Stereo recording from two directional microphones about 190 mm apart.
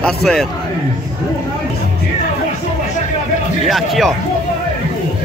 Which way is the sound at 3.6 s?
Centre (ahead or behind).